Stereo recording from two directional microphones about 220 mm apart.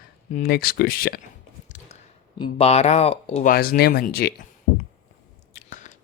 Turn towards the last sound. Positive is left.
turn(degrees=35)  # may be behind; listen again after turning